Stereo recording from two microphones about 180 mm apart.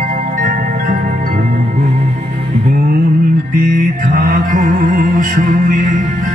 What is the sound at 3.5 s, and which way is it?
Music, 55° right (ahead or behind).